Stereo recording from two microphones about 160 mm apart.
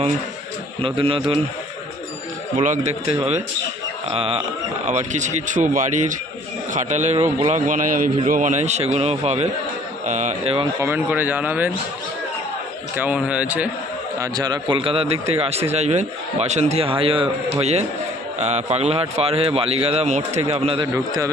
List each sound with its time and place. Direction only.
0.8 s a man's voice: 35° right (ahead or behind)
2.6 s a man's voice: 45° right (ahead or behind)
4.9 s a man's voice: 45° right (ahead or behind)
7.7 s a man's voice: 55° right (ahead or behind); by 10.7 s 40° right (ahead or behind)
10.8 s a man's voice: 15° right (ahead or behind)
13.0 s a man's voice: 10° right (ahead or behind)
14.2 s a man's voice: 25° right (ahead or behind)